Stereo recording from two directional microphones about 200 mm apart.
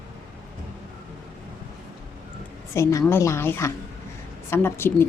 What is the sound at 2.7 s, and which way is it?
A woman's voice, 15° left (ahead or behind).